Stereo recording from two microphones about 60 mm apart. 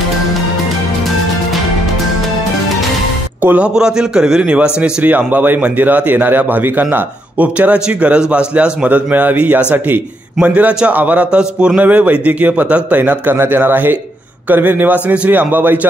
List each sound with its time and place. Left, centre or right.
3.4 s speech: right
3.7 s a man's voice: centre
5.0 s a man's voice: right
7.5 s speech: right
8.8 s a man's voice: right
11.3 s a man's voice: centre; by 15.9 s right